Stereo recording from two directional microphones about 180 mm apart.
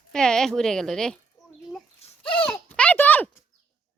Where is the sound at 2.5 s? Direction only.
10° left (ahead or behind).